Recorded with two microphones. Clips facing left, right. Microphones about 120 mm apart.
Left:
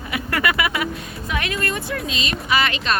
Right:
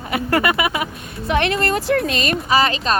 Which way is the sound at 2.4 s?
35° right (ahead or behind).